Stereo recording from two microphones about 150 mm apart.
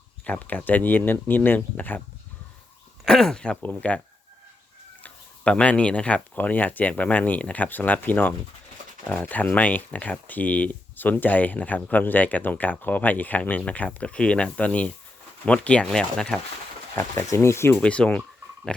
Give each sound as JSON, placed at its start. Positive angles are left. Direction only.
{"t": 0.3, "sound": "speech", "side_deg": 10}
{"t": 3.0, "sound": "speech", "side_deg": 5}
{"t": 5.0, "sound": "speech", "side_deg": 10}
{"t": 16.9, "sound": "speech", "side_deg": 15}
{"t": 17.7, "sound": "speech", "side_deg": 5}